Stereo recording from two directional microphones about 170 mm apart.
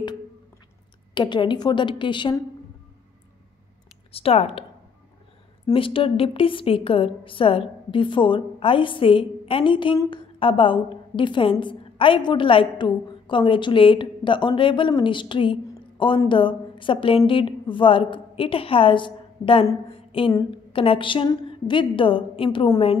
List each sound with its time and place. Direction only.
1.1 s a woman's voice: 25° left (ahead or behind)
4.1 s a woman's voice: 35° left (ahead or behind)
5.7 s a woman's voice: 30° left (ahead or behind)